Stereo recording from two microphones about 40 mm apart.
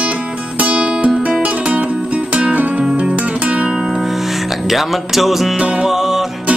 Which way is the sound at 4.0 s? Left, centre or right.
Centre.